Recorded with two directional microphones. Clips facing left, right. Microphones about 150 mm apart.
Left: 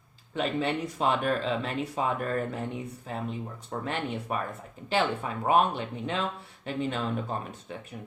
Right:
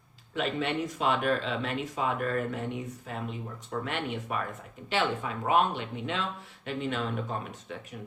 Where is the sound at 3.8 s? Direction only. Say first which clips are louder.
Left 2 dB; 35° left (ahead or behind).